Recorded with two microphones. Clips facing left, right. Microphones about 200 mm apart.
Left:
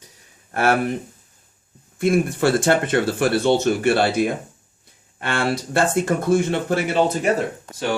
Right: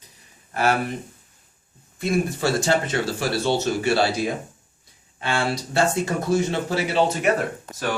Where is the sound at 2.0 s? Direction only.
55° left (ahead or behind).